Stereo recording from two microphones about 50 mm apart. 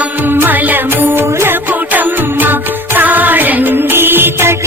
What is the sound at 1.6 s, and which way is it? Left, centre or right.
Music, right.